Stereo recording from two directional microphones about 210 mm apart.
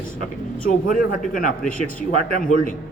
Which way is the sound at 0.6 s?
40° left (ahead or behind).